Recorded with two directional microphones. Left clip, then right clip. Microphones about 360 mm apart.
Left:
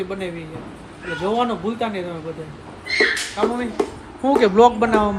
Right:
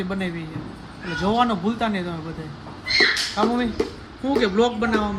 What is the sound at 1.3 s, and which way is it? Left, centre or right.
Speech, centre.